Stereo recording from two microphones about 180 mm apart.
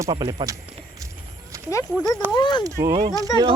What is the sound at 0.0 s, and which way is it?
Speech, 25° right (ahead or behind).